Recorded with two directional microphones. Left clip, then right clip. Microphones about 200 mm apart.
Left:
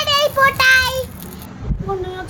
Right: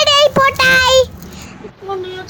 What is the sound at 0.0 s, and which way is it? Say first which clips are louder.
Child singing: right 4 dB; 50° right (ahead or behind).